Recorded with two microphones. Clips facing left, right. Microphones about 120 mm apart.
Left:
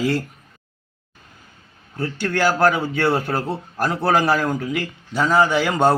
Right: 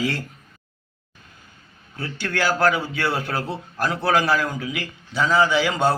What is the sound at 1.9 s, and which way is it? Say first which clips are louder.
A man's voice: left 4 dB; 45° left (ahead or behind).